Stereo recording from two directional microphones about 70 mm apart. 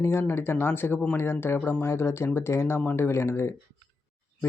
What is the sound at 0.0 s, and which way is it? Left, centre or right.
Speech, left.